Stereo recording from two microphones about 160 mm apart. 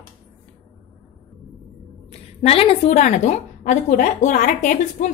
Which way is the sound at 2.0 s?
40° left (ahead or behind).